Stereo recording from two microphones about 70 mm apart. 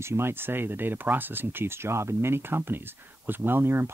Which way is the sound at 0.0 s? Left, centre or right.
Right.